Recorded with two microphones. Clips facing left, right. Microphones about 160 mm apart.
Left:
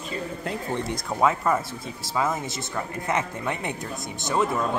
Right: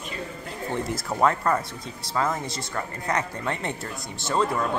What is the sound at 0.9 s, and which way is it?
Speech, centre (ahead or behind).